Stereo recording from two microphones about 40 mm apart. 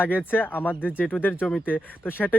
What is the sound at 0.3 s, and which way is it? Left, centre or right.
Speech, left.